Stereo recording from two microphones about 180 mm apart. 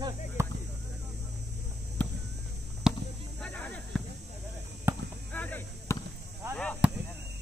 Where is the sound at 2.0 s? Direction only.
5° left (ahead or behind).